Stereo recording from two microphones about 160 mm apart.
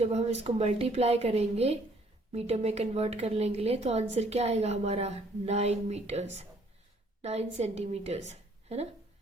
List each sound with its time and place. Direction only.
0.0 s a woman's voice: 45° right (ahead or behind)